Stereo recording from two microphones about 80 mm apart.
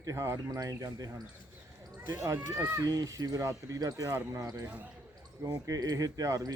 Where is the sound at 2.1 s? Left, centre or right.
Right.